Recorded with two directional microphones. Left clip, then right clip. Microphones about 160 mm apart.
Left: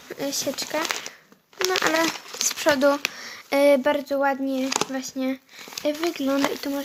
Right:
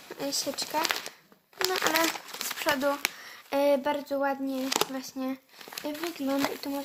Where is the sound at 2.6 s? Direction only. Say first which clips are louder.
Left 7 dB; 45° left (ahead or behind).